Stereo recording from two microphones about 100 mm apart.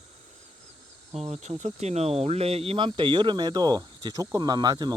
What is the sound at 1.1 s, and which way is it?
Speech, 90° right.